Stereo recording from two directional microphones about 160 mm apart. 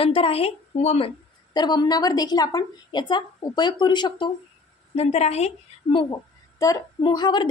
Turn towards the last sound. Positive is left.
turn(degrees=30)  # may be behind; listen again after turning